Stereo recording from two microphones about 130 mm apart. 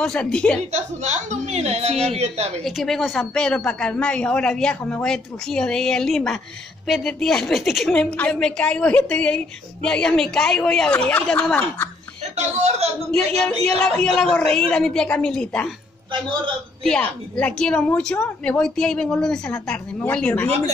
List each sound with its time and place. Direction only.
0.0 s a woman's voice: 5° left (ahead or behind)
0.7 s a woman's voice: 65° right (ahead or behind)
2.6 s a woman's voice: centre (ahead or behind)
12.4 s a woman's voice: 60° right (ahead or behind)
13.7 s a woman's voice: 5° left (ahead or behind)
16.8 s a woman's voice: 5° left (ahead or behind)
20.4 s a woman's voice: 50° right (ahead or behind)